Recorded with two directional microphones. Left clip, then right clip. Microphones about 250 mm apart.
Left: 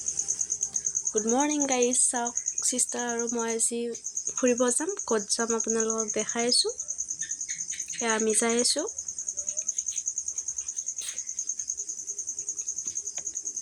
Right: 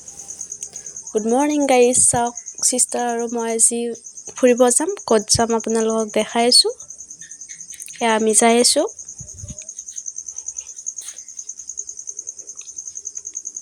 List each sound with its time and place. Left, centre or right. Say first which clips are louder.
1.1 s speech: right 9 dB; centre
7.9 s speech: right 10 dB; right